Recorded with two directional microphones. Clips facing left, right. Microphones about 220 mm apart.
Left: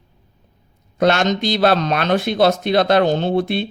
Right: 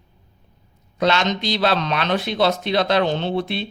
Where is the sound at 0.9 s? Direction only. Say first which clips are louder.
Left 4 dB; 50° left (ahead or behind).